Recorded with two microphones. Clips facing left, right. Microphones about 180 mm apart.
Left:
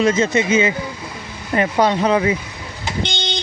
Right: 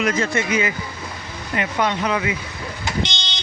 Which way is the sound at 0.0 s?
25° left (ahead or behind).